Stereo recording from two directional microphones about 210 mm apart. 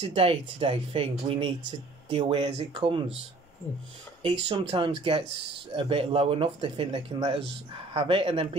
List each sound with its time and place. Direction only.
0.1 s speech: 25° right (ahead or behind)
4.2 s speech: 25° right (ahead or behind)